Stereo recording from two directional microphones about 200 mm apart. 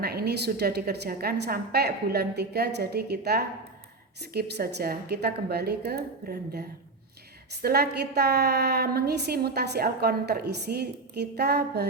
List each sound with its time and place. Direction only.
0.0 s a woman's voice: 50° right (ahead or behind)